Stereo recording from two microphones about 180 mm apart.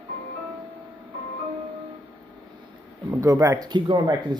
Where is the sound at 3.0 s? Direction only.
20° right (ahead or behind).